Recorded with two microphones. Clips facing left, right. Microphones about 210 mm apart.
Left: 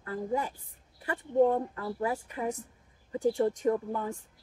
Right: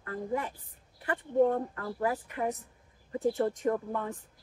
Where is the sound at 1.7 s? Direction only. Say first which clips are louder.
Even; 25° left (ahead or behind).